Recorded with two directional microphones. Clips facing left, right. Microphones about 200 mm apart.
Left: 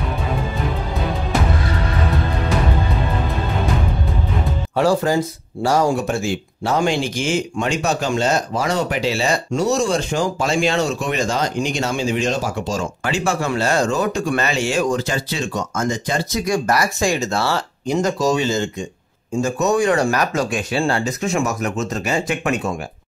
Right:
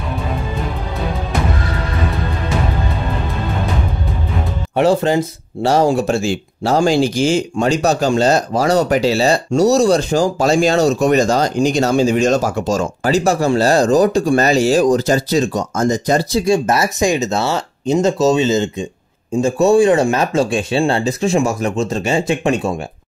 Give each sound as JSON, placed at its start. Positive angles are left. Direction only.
{"t": 4.7, "sound": "speech", "side_deg": -20}